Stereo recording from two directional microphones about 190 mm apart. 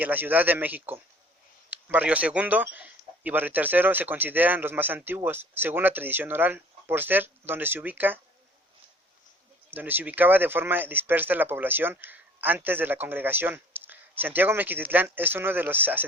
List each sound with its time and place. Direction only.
0.0 s speech: 10° right (ahead or behind)
9.6 s speech: 10° right (ahead or behind)